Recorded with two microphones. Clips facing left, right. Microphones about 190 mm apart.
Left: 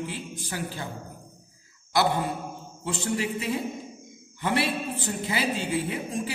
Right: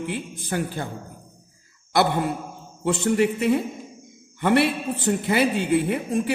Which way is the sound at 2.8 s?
60° right (ahead or behind).